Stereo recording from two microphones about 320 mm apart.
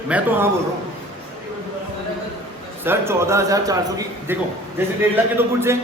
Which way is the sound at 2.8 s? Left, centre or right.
Centre.